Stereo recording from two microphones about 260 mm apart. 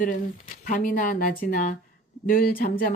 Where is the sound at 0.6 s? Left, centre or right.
Left.